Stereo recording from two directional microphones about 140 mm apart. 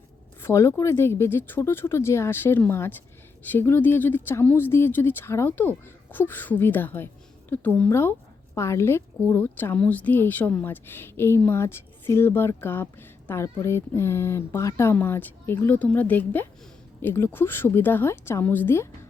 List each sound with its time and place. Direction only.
0.4 s a woman's voice: 20° left (ahead or behind)